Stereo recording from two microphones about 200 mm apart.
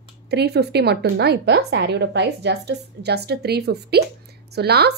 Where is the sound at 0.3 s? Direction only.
55° right (ahead or behind).